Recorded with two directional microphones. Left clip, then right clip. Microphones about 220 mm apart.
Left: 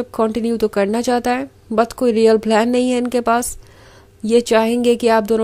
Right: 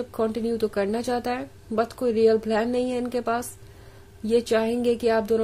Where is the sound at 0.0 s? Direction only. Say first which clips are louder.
Left 7 dB; 30° left (ahead or behind).